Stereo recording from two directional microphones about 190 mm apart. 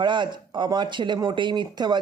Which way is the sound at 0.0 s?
25° right (ahead or behind).